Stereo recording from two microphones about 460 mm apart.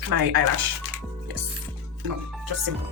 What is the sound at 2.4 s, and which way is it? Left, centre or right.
Music, right.